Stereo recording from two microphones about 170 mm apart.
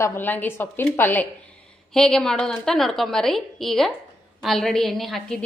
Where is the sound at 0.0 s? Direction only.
15° left (ahead or behind).